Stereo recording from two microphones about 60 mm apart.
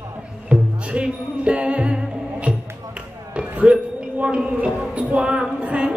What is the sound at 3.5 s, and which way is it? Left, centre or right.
Music, centre.